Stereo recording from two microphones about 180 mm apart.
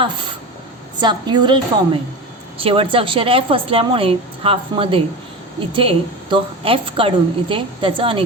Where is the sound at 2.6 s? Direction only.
30° right (ahead or behind).